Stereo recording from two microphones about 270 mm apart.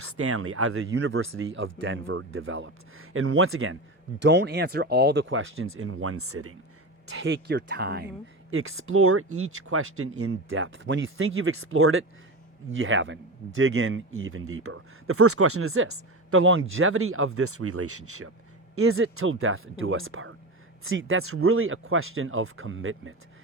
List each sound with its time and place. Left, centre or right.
0.0 s speech: right
8.4 s speech: right